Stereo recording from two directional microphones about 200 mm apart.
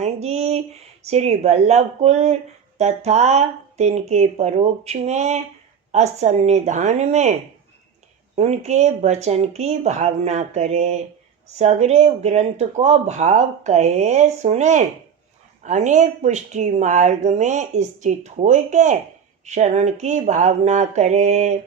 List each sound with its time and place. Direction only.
0.0 s speech: 30° right (ahead or behind)
8.4 s speech: 35° right (ahead or behind)